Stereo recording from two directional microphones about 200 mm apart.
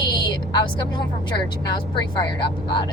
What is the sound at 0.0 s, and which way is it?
Vehicle, 20° left (ahead or behind).